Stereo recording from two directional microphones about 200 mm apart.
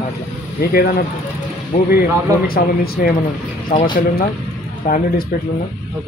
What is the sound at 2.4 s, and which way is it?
Speech, 50° left (ahead or behind).